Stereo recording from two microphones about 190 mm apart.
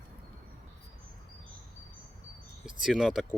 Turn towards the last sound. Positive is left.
turn(degrees=-5)  # may be behind; listen again after turning